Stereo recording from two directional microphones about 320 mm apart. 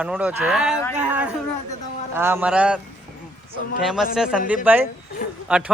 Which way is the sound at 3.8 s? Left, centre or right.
Centre.